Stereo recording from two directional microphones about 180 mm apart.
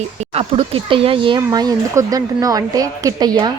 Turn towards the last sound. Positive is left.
turn(degrees=-20)  # may be behind; listen again after turning